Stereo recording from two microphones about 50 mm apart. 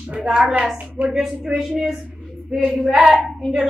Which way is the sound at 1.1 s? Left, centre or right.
Centre.